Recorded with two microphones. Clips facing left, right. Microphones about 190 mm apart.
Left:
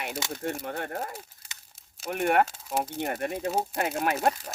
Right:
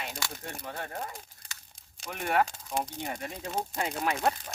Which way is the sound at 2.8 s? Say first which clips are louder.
Left 5 dB; 60° left (ahead or behind).